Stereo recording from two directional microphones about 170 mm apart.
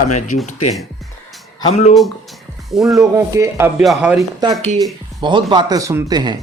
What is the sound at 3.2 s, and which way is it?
Speech, 20° right (ahead or behind).